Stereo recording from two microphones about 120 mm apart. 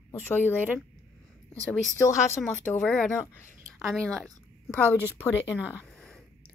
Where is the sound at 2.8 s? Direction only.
5° left (ahead or behind).